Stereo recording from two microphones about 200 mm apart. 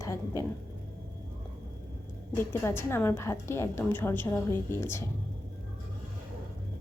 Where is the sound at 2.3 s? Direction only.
10° left (ahead or behind).